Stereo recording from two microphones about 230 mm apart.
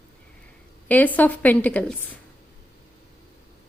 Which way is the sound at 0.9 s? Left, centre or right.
Centre.